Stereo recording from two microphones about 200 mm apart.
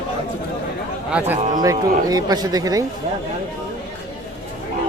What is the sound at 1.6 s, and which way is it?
Speech, 20° right (ahead or behind).